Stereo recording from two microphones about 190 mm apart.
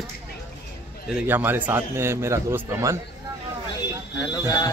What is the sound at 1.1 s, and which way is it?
A man's voice, 5° right (ahead or behind).